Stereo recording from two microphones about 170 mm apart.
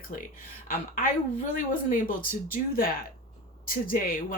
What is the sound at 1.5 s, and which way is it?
Speech, 50° left (ahead or behind).